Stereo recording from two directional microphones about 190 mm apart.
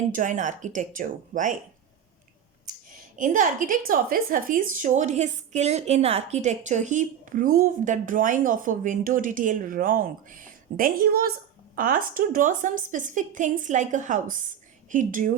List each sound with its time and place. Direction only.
0.1 s speech: 40° right (ahead or behind)
3.2 s speech: 45° right (ahead or behind)